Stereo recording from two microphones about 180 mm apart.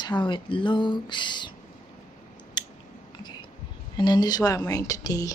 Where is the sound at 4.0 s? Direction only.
25° left (ahead or behind).